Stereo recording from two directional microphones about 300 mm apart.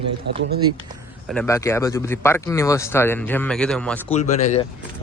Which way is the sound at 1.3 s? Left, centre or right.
Centre.